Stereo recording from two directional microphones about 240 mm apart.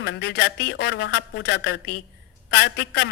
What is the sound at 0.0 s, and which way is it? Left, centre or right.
A woman's voice, left.